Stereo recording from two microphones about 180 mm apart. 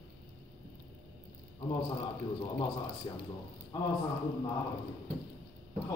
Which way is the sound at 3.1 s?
25° left (ahead or behind).